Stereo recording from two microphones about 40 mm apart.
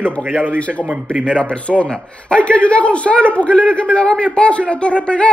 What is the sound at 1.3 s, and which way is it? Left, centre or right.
Speech, centre.